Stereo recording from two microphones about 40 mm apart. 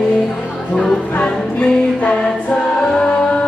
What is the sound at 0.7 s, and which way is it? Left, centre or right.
Music, centre.